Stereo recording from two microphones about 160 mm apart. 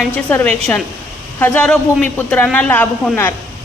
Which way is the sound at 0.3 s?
10° left (ahead or behind).